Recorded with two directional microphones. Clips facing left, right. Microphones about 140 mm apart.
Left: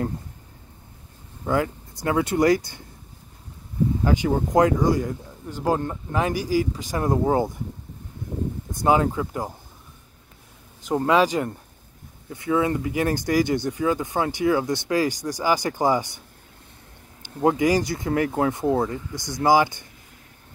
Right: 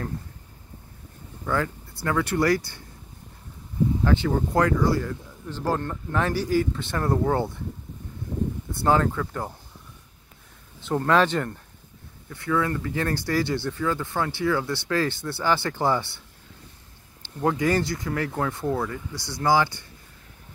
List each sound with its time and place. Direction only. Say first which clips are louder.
1.4 s speech: left 3 dB; 15° left (ahead or behind)
4.0 s speech: left 2 dB; 15° left (ahead or behind)
8.8 s speech: left 2 dB; 10° left (ahead or behind)
10.9 s speech: left 2 dB; 10° left (ahead or behind)
17.2 s speech: left 4 dB; 20° left (ahead or behind)